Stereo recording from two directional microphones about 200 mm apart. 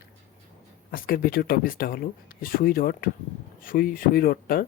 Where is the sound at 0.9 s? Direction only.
45° left (ahead or behind).